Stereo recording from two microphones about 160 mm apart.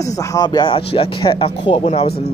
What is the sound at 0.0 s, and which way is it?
Speech, 20° left (ahead or behind).